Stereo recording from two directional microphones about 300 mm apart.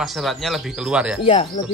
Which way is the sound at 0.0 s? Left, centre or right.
Centre.